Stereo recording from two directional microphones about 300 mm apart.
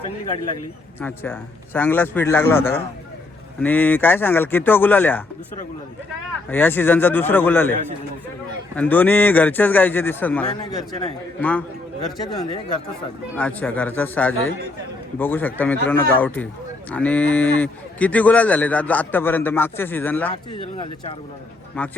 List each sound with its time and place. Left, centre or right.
0.9 s a man's voice: centre
6.5 s a man's voice: centre
13.3 s a man's voice: centre
21.7 s a man's voice: centre